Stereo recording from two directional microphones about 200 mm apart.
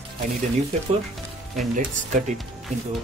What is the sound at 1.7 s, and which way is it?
Speech, 40° right (ahead or behind).